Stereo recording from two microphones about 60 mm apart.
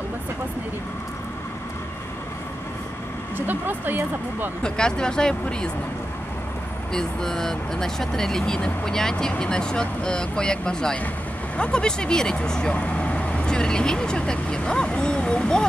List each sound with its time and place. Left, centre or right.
3.3 s speech: right
4.6 s speech: centre
6.9 s speech: centre